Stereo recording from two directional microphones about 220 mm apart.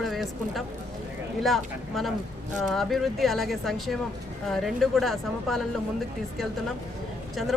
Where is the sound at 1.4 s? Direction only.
Centre (ahead or behind).